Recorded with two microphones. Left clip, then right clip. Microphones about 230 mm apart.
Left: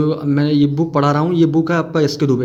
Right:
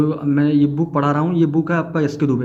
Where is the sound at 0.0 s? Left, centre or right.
Left.